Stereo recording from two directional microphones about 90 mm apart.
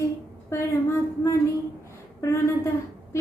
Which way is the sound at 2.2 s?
35° left (ahead or behind).